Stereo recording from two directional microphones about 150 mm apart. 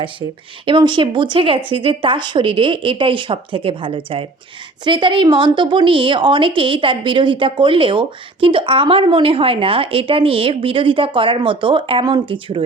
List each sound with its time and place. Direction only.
0.0 s a woman's voice: 35° right (ahead or behind)